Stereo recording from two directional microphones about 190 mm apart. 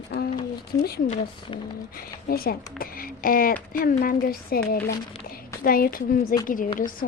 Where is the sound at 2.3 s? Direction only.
50° left (ahead or behind).